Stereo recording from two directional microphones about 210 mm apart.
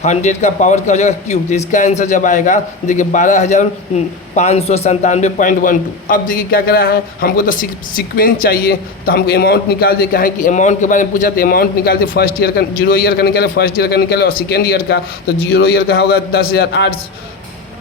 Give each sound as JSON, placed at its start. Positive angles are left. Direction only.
{"t": 0.0, "sound": "a man's voice", "side_deg": 35}